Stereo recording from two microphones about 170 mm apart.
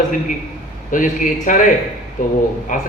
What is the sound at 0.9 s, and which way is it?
Speech, 50° left (ahead or behind).